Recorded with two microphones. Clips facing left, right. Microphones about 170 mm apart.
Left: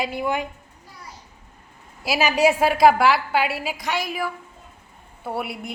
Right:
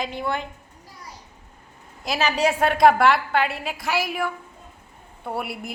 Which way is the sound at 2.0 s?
10° left (ahead or behind).